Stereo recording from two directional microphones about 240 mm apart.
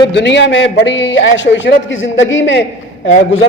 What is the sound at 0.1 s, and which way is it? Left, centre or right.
A woman's voice, left.